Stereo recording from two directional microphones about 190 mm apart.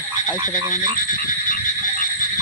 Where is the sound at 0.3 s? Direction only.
20° right (ahead or behind).